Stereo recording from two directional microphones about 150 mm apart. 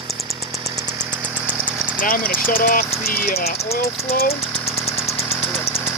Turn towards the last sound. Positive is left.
turn(degrees=85)